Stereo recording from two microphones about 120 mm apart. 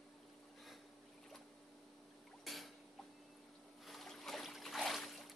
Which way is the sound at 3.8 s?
Centre (ahead or behind).